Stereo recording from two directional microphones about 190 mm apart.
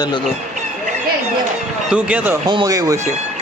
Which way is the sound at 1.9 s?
5° right (ahead or behind).